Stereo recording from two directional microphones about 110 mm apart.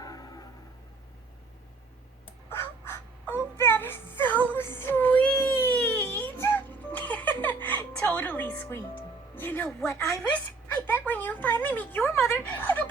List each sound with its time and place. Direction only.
0.0 s music: 35° left (ahead or behind)
2.5 s wail: 20° left (ahead or behind)
9.3 s music: 15° left (ahead or behind)
9.8 s a woman's voice: 25° left (ahead or behind)
10.3 s a sound: 15° left (ahead or behind)